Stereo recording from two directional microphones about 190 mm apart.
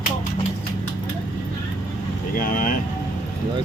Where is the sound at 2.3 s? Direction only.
45° left (ahead or behind).